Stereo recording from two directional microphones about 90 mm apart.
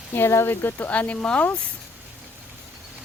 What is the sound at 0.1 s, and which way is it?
Speech, 25° left (ahead or behind).